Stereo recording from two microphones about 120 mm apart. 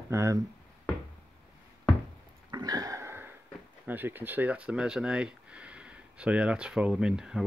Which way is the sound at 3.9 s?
15° right (ahead or behind).